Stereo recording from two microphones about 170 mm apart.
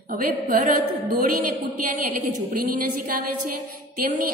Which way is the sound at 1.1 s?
55° right (ahead or behind).